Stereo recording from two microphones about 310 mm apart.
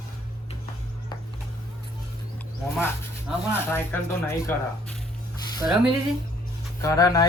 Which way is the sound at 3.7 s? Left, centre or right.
Centre.